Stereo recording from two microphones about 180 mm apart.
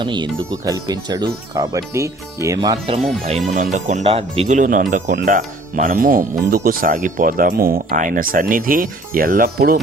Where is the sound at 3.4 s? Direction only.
45° right (ahead or behind).